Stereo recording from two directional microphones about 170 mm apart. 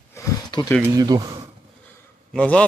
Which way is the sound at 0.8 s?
20° right (ahead or behind).